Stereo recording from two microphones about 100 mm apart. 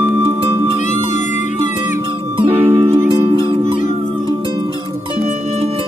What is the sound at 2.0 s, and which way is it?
Music, 55° right (ahead or behind).